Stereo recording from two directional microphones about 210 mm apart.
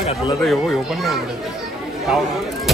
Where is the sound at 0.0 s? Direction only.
30° left (ahead or behind).